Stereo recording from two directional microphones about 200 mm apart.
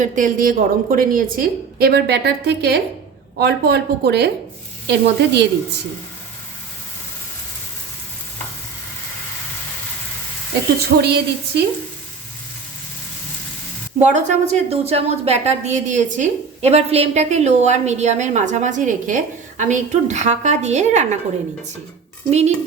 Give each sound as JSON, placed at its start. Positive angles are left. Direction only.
{"t": 0.0, "sound": "a woman's voice", "side_deg": -40}
{"t": 11.0, "sound": "speech", "side_deg": -55}
{"t": 14.0, "sound": "a woman's voice", "side_deg": -35}
{"t": 22.3, "sound": "a woman's voice", "side_deg": -35}